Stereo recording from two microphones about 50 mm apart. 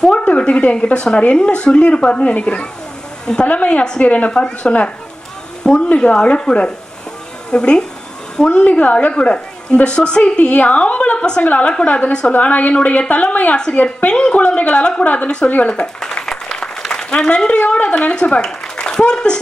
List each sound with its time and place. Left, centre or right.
0.0 s a woman's voice: left
16.3 s a sound: centre
18.8 s a woman's voice: centre